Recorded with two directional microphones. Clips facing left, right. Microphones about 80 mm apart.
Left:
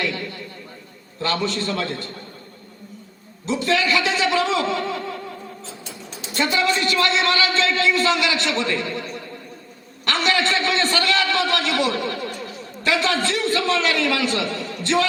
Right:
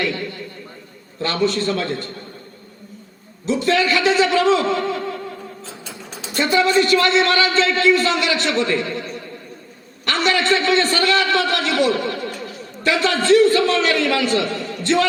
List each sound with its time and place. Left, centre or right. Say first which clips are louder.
1.2 s a man's voice: right 4 dB; right
3.4 s a man's voice: right 3 dB; right
6.3 s a man's voice: right 5 dB; right
10.1 s a sound: right 2 dB; right
10.5 s a man's voice: right 4 dB; right